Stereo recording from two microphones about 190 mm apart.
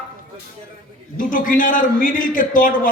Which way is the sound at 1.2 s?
45° left (ahead or behind).